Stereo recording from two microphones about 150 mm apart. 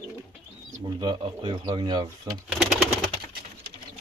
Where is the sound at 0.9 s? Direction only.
30° right (ahead or behind).